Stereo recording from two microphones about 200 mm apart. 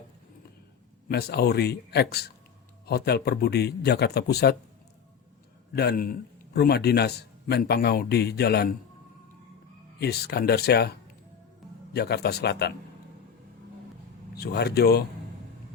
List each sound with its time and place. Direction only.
1.0 s a man's voice: 55° left (ahead or behind)
5.7 s a man's voice: 55° left (ahead or behind)
10.0 s a man's voice: 55° left (ahead or behind)
11.9 s speech: 55° left (ahead or behind)
14.3 s a man's voice: 55° left (ahead or behind)